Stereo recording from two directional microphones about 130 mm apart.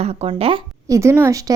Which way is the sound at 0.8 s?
25° right (ahead or behind).